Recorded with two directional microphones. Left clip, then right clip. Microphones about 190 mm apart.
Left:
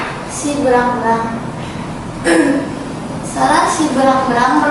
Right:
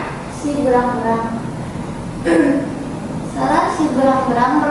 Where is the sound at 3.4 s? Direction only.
20° right (ahead or behind).